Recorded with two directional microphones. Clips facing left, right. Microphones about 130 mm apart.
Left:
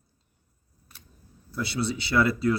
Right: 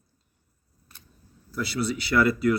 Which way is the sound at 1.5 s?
25° left (ahead or behind).